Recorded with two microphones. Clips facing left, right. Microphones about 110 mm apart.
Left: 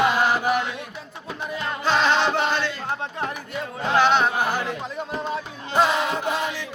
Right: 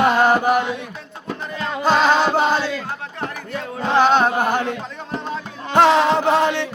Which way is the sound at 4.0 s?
45° right (ahead or behind).